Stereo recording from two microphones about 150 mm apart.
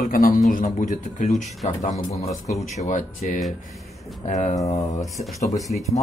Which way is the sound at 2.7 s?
55° left (ahead or behind).